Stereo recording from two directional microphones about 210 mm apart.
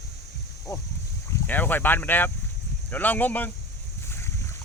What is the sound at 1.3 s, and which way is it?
Speech, 10° left (ahead or behind).